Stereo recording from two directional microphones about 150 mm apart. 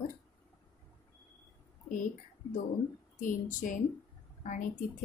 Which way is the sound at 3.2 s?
60° left (ahead or behind).